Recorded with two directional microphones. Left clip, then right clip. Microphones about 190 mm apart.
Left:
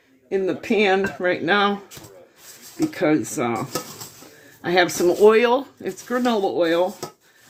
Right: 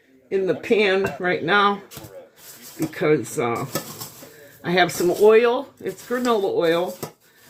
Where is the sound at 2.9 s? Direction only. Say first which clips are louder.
Right 2 dB; 50° left (ahead or behind).